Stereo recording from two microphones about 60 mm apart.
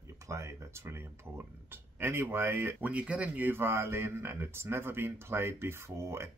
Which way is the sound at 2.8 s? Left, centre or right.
Right.